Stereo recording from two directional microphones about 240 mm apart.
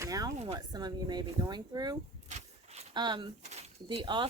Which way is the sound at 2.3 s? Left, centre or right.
Right.